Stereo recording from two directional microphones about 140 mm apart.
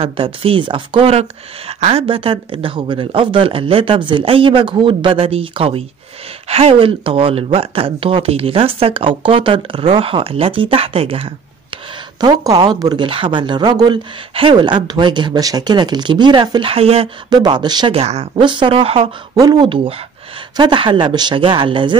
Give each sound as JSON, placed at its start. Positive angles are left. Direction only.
{"t": 0.0, "sound": "speech", "side_deg": -40}
{"t": 12.2, "sound": "speech", "side_deg": -30}
{"t": 17.3, "sound": "speech", "side_deg": -30}
{"t": 17.9, "sound": "speech", "side_deg": -50}
{"t": 18.3, "sound": "speech", "side_deg": -35}
{"t": 19.3, "sound": "speech", "side_deg": -30}